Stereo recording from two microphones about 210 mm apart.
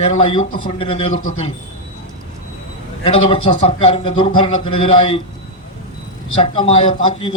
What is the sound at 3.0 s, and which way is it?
A man's voice, 25° left (ahead or behind).